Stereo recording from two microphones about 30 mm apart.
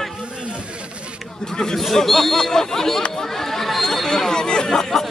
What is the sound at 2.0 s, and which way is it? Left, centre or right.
A man's voice, centre.